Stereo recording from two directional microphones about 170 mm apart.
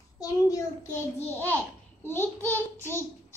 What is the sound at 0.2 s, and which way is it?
Child singing, 20° left (ahead or behind).